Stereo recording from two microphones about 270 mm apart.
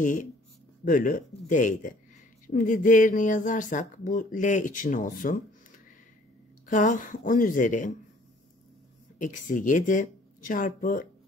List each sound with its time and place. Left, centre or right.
0.0 s speech: left
6.7 s speech: left
9.2 s speech: left